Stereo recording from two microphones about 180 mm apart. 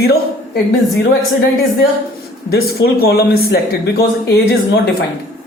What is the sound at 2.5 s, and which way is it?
Speech, 60° left (ahead or behind).